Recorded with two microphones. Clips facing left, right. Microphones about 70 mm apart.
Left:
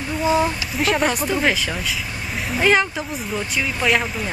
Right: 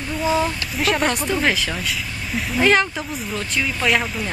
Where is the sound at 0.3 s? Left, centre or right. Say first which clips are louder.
Left 2 dB; centre.